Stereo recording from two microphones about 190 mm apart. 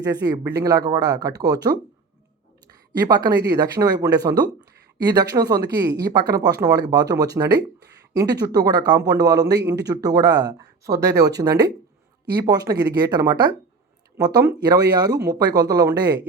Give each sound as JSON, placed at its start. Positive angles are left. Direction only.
{"t": 0.0, "sound": "speech", "side_deg": -20}
{"t": 12.3, "sound": "speech", "side_deg": -20}